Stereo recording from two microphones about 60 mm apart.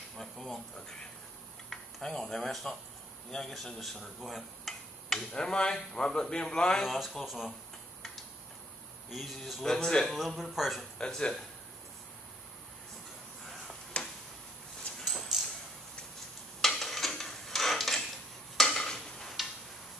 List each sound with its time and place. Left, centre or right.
0.2 s speech: centre
4.2 s dishes: centre
5.3 s speech: centre
6.8 s speech: centre
9.1 s speech: centre
9.7 s speech: centre
10.1 s speech: centre
11.0 s speech: centre
13.9 s tick-tock: centre
15.0 s a sound: centre
16.6 s stir: centre